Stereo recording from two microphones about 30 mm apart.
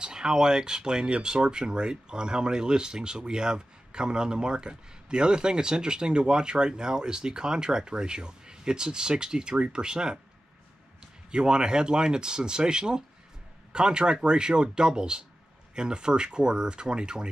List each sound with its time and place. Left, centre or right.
0.0 s speech: right
11.3 s speech: right